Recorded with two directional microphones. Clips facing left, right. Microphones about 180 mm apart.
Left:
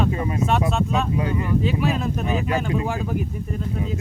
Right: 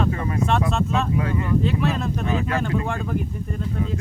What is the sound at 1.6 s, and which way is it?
Speech, centre (ahead or behind).